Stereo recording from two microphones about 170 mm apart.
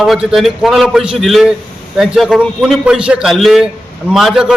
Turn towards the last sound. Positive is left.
turn(degrees=-5)  # may be behind; listen again after turning